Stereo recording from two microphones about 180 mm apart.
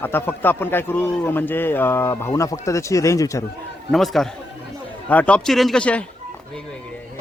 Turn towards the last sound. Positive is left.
turn(degrees=5)  # may be behind; listen again after turning